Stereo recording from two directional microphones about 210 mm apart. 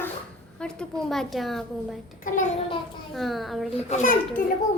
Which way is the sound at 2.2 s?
40° left (ahead or behind).